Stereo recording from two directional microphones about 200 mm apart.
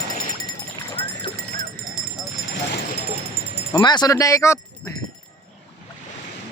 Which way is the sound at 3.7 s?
20° left (ahead or behind).